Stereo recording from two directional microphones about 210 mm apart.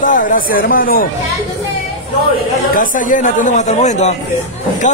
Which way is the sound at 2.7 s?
35° left (ahead or behind).